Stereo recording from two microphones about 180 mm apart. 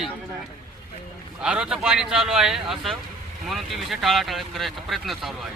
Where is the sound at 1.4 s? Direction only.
5° right (ahead or behind).